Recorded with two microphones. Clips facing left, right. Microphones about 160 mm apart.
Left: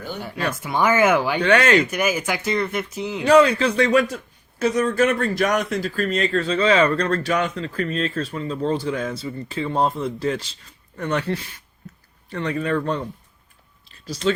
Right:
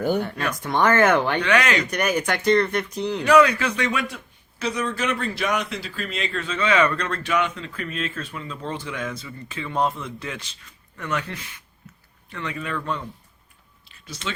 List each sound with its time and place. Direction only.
0.2 s speech: 5° left (ahead or behind)
1.4 s speech: 30° left (ahead or behind)
1.9 s speech: 5° left (ahead or behind)
3.2 s speech: 30° left (ahead or behind)
13.8 s a sound: 35° left (ahead or behind)